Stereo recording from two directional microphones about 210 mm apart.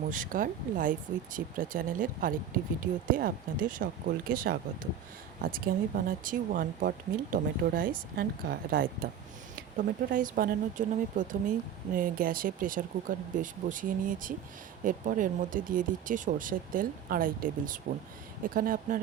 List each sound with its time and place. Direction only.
0.1 s speech: 40° right (ahead or behind)